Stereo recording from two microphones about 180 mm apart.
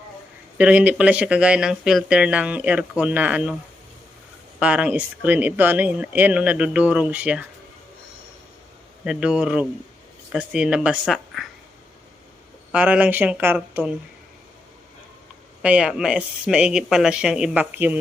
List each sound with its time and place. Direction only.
0.6 s speech: 5° right (ahead or behind)
4.6 s speech: 5° right (ahead or behind)
9.0 s speech: 5° right (ahead or behind)
12.7 s speech: 10° right (ahead or behind)
15.6 s speech: 5° right (ahead or behind)